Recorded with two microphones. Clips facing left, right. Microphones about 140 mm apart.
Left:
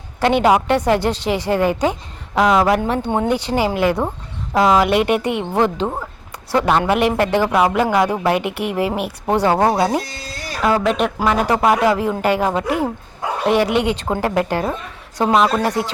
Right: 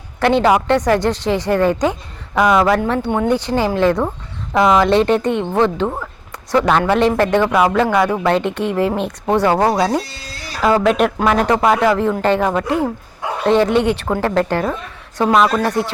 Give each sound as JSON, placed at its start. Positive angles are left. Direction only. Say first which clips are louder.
{"t": 0.2, "sound": "a man's voice", "louder": "right 1 dB", "side_deg": 15}
{"t": 10.6, "sound": "a man's voice", "louder": "right 3 dB", "side_deg": 0}